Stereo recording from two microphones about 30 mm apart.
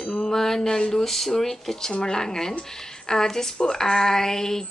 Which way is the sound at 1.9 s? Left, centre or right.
Left.